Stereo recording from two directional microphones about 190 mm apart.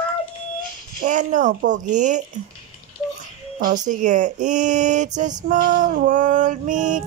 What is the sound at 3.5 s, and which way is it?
Speech, 45° right (ahead or behind).